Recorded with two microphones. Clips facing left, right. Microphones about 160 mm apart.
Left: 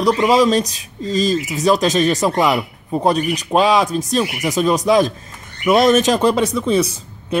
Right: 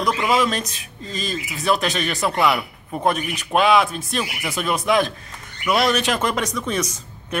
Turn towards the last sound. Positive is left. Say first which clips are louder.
# left 7 dB
turn(degrees=30)  # may be behind; listen again after turning